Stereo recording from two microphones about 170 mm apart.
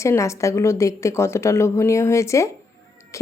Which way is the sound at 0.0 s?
15° left (ahead or behind).